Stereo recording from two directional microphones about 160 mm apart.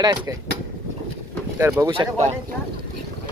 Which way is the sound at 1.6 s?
20° right (ahead or behind).